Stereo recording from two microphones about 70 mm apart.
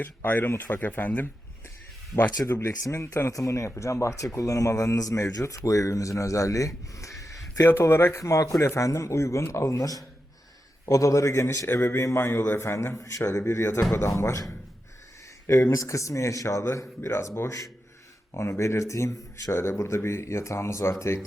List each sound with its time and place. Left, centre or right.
0.0 s speech: left
2.4 s speech: left
7.7 s a man's voice: left
8.2 s a man's voice: left
15.4 s a man's voice: left